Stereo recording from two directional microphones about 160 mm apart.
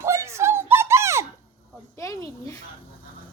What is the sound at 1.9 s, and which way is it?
Speech, 20° left (ahead or behind).